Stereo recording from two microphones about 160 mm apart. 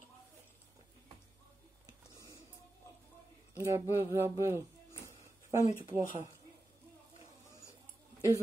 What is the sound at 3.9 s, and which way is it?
Speech, 15° right (ahead or behind).